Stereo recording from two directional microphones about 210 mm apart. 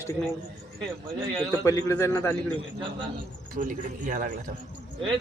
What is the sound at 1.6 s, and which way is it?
Speech, 15° left (ahead or behind).